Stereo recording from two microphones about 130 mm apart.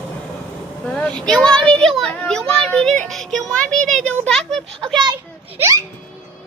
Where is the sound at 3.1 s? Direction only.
Centre (ahead or behind).